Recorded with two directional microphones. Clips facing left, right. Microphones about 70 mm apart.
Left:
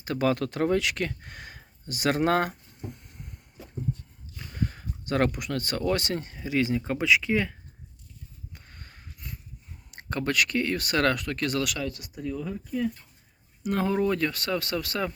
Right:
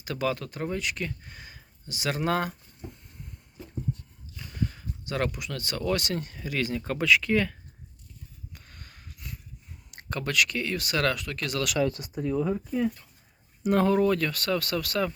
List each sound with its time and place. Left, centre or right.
0.0 s speech: left
0.4 s speech: left
4.6 s speech: left; by 7.5 s centre
8.5 s a sound: left
9.9 s speech: left
11.8 s speech: right
13.7 s speech: centre